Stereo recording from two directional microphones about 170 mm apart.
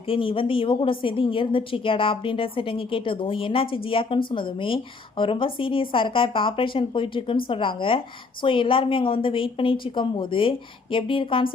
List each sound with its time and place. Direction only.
0.1 s a woman's voice: 30° left (ahead or behind)